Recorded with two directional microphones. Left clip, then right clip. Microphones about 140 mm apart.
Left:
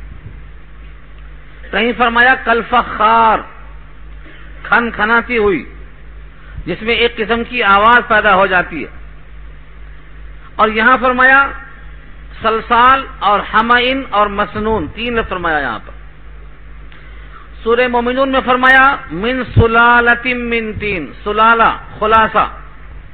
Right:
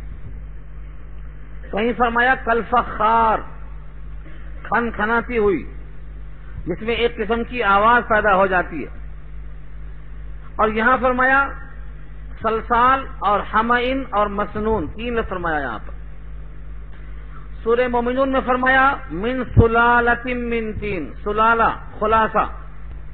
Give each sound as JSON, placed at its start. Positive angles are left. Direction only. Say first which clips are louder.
{"t": 1.7, "sound": "a man's voice", "louder": "left 6 dB", "side_deg": 30}
{"t": 4.6, "sound": "a man's voice", "louder": "left 8 dB", "side_deg": 30}
{"t": 6.7, "sound": "a man's voice", "louder": "left 7 dB", "side_deg": 25}
{"t": 10.5, "sound": "a man's voice", "louder": "left 6 dB", "side_deg": 30}
{"t": 17.6, "sound": "a man's voice", "louder": "left 6 dB", "side_deg": 25}